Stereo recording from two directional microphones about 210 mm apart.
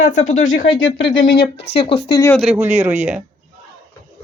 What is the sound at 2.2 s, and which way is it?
Speech, 10° left (ahead or behind).